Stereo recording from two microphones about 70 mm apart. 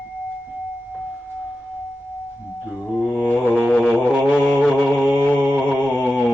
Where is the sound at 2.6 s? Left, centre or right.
Centre.